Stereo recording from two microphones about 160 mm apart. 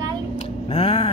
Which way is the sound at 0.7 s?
40° left (ahead or behind).